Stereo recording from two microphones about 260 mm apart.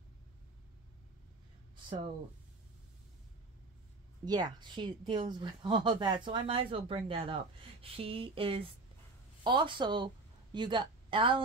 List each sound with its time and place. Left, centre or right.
4.2 s a woman's voice: centre